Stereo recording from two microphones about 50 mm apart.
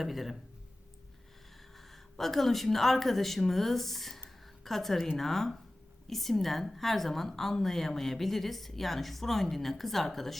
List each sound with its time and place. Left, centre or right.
0.0 s a woman's voice: centre
1.7 s a woman's voice: centre